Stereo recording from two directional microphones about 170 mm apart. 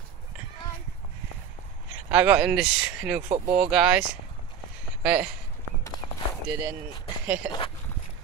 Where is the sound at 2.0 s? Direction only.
10° right (ahead or behind).